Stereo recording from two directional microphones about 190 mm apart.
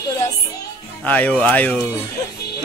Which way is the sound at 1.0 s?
5° left (ahead or behind).